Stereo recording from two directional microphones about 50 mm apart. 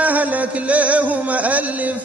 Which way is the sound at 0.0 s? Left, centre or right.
Right.